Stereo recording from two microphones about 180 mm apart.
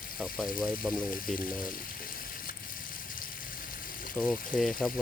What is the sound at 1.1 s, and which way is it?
Speech, 50° left (ahead or behind).